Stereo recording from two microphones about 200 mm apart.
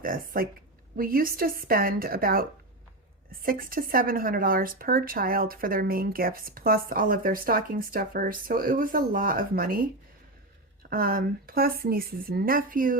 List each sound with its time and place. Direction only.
0.0 s speech: 45° right (ahead or behind)
10.8 s speech: 45° right (ahead or behind)